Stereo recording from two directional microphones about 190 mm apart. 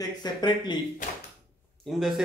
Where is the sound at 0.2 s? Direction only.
20° left (ahead or behind).